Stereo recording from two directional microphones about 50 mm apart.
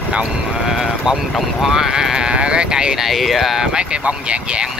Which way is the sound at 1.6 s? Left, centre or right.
Centre.